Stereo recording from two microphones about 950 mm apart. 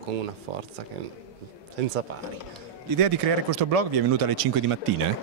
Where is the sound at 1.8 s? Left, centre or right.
Right.